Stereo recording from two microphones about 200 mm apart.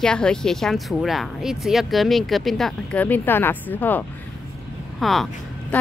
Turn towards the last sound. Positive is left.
turn(degrees=0)  # may be behind; listen again after turning